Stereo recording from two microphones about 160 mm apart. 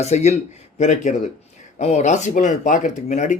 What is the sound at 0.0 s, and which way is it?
Speech, 45° left (ahead or behind).